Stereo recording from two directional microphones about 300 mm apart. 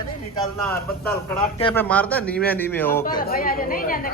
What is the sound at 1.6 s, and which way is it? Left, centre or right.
Speech, centre.